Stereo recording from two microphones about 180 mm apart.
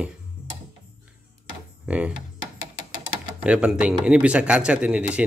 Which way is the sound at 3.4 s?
5° right (ahead or behind).